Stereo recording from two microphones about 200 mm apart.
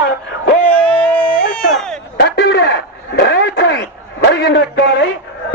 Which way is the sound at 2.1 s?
55° left (ahead or behind).